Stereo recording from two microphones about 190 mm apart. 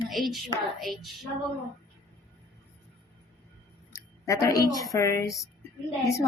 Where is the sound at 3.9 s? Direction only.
15° left (ahead or behind).